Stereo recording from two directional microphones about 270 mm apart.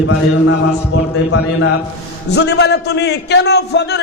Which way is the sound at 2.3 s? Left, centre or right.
Left.